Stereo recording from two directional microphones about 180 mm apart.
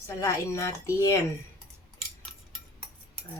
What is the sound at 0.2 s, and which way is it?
Speech, 15° left (ahead or behind).